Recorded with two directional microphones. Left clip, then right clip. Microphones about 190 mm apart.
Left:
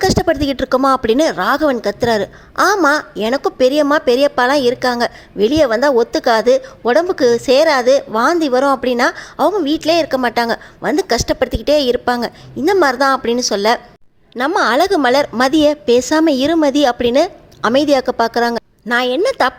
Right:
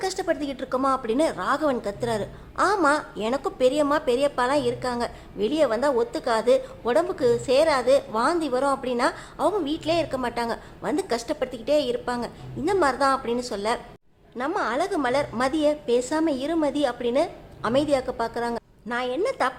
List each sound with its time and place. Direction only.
0.0 s speech: 35° left (ahead or behind)